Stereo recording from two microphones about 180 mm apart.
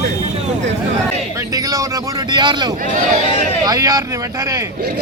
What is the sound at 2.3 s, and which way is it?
Speech, 25° right (ahead or behind).